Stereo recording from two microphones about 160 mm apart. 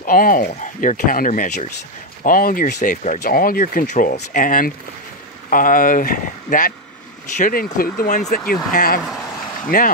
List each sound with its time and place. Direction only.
0.0 s speech: 60° left (ahead or behind)